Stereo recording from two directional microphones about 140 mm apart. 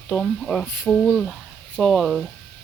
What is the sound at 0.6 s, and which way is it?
Speech, 15° left (ahead or behind).